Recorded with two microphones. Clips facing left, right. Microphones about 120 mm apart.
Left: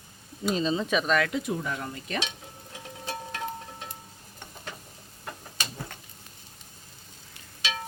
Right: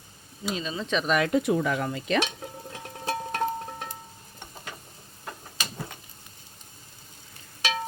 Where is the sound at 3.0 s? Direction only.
50° right (ahead or behind).